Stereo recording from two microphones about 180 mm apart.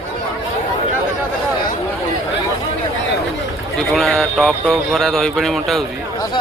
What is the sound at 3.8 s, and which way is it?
Speech, 5° left (ahead or behind).